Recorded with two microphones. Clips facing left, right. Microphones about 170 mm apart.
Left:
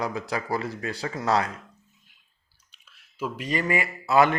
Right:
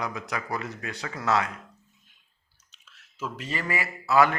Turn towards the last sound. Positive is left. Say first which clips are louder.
# left 1 dB
turn(degrees=20)  # may be behind; listen again after turning